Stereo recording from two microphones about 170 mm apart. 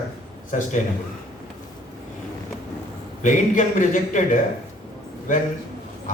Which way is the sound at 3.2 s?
50° left (ahead or behind).